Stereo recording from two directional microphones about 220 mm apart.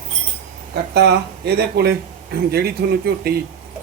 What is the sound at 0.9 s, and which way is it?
Speech, 50° right (ahead or behind).